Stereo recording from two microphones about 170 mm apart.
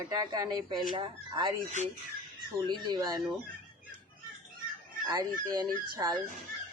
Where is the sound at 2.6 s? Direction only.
25° right (ahead or behind).